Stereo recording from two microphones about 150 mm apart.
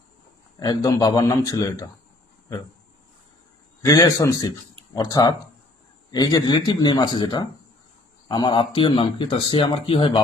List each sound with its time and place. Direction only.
0.6 s speech: 25° left (ahead or behind)
3.8 s speech: 25° left (ahead or behind)